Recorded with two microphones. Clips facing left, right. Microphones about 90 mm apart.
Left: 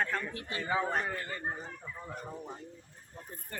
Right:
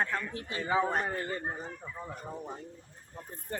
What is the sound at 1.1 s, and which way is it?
Speech, 30° right (ahead or behind).